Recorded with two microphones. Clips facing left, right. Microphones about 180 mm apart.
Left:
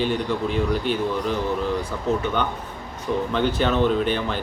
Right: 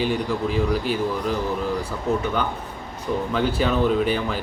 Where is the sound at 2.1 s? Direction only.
25° left (ahead or behind).